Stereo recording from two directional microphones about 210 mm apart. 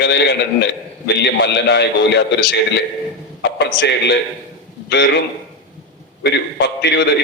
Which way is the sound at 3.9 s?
55° left (ahead or behind).